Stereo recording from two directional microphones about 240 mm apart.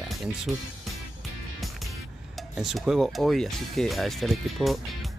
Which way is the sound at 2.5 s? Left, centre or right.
Centre.